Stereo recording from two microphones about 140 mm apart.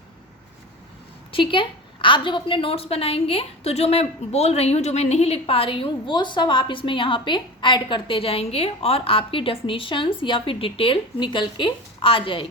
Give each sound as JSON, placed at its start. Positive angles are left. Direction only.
{"t": 1.3, "sound": "a woman's voice", "side_deg": 40}